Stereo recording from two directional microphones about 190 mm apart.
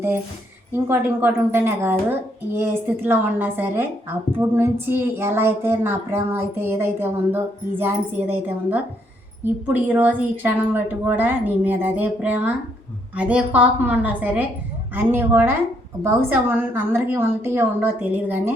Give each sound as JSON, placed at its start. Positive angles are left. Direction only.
{"t": 0.9, "sound": "speech", "side_deg": -10}